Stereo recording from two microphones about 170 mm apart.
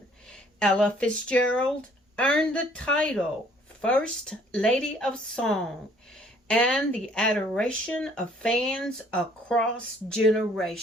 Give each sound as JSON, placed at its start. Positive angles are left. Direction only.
{"t": 0.3, "sound": "speech", "side_deg": 5}